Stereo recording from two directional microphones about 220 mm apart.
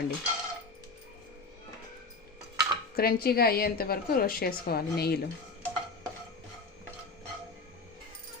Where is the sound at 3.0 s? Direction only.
45° left (ahead or behind).